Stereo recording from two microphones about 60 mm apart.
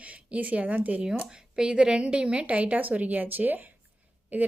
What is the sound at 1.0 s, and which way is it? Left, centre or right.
A woman's voice, centre.